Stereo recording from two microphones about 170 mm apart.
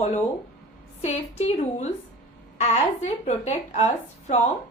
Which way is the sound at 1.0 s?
40° left (ahead or behind).